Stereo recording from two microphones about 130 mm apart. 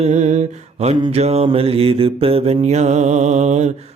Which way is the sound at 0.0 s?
65° right (ahead or behind).